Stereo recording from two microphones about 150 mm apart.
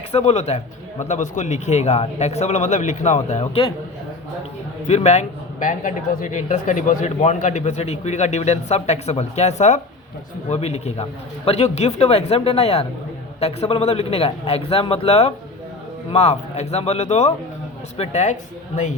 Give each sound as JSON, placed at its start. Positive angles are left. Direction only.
{"t": 0.1, "sound": "a man's voice", "side_deg": 45}
{"t": 4.9, "sound": "a man's voice", "side_deg": 50}